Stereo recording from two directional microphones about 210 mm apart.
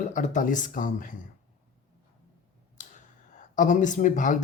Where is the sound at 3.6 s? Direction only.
35° left (ahead or behind).